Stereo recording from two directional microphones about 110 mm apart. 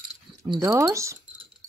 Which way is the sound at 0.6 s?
30° right (ahead or behind).